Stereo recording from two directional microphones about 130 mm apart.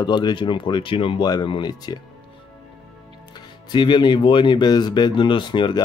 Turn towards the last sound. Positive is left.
turn(degrees=35)  # may be behind; listen again after turning